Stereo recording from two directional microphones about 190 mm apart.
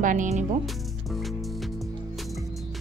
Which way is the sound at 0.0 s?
40° right (ahead or behind).